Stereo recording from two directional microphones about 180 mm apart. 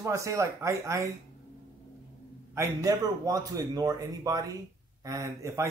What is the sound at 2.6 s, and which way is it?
Speech, 20° right (ahead or behind).